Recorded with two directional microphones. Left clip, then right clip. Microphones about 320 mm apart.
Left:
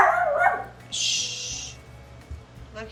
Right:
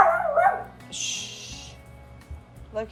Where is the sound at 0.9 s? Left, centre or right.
Centre.